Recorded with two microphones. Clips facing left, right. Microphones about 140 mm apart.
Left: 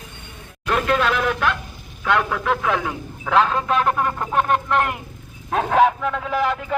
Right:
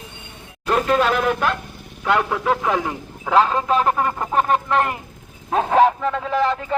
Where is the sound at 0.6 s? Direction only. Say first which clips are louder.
Right 2 dB; 35° right (ahead or behind).